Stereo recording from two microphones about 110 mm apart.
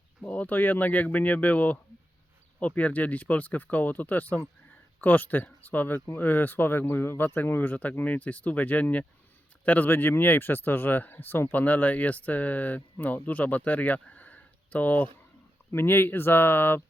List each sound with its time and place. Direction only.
0.2 s speech: 15° left (ahead or behind)